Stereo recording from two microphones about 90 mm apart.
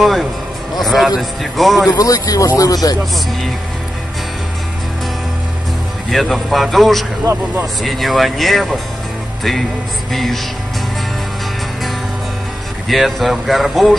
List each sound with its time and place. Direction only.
0.0 s speech: centre (ahead or behind)
1.9 s speech: 40° left (ahead or behind)
6.1 s speech: centre (ahead or behind)
7.3 s speech: 40° right (ahead or behind)
7.8 s speech: centre (ahead or behind)
10.1 s speech: centre (ahead or behind)
12.8 s speech: centre (ahead or behind)